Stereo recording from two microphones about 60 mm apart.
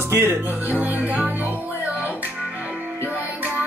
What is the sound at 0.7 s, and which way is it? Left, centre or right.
Music, right.